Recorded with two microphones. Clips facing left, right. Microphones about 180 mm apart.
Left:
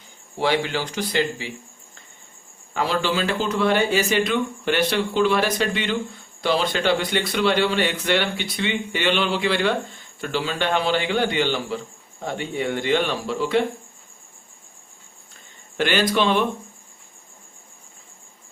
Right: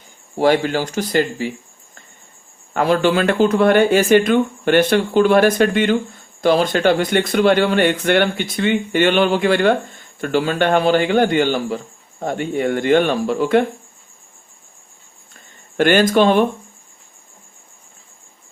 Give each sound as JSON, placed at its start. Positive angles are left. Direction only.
{"t": 0.3, "sound": "speech", "side_deg": -45}
{"t": 2.7, "sound": "speech", "side_deg": -55}
{"t": 15.8, "sound": "speech", "side_deg": -50}